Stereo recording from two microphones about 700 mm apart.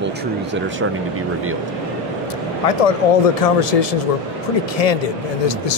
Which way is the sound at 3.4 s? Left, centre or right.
Left.